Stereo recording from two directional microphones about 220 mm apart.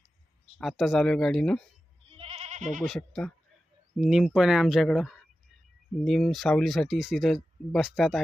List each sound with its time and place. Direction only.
0.6 s speech: centre (ahead or behind)
2.0 s goat: 25° right (ahead or behind)
2.8 s speech: centre (ahead or behind)